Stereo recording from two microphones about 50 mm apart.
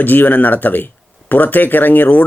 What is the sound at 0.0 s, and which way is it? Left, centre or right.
Speech, left.